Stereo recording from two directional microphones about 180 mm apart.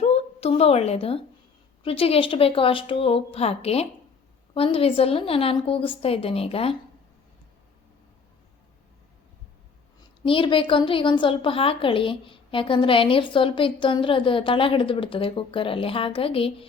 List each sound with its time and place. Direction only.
0.0 s a woman's voice: 35° left (ahead or behind)
10.2 s a woman's voice: 30° left (ahead or behind)